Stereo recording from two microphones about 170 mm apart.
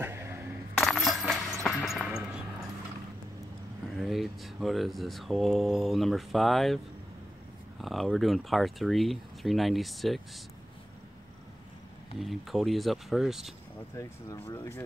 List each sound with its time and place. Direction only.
0.0 s coin: 15° right (ahead or behind)
0.8 s coin: centre (ahead or behind)
4.0 s speech: centre (ahead or behind)
7.8 s speech: centre (ahead or behind)
12.2 s speech: centre (ahead or behind)
14.0 s speech: 15° left (ahead or behind)